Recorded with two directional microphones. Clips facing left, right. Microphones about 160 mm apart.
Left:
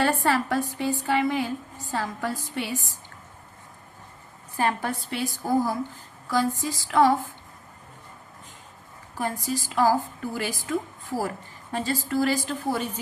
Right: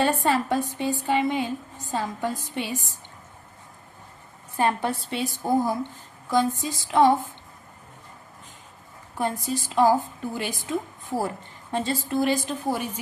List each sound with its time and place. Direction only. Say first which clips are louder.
0.0 s a woman's voice: right 1 dB; 20° right (ahead or behind)
4.5 s a woman's voice: right 2 dB; 25° right (ahead or behind)
9.1 s a woman's voice: right 2 dB; 25° right (ahead or behind)